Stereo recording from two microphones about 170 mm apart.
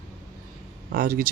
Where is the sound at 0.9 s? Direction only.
55° right (ahead or behind).